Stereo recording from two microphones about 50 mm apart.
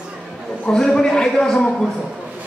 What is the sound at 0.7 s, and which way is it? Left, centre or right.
A man's voice, centre.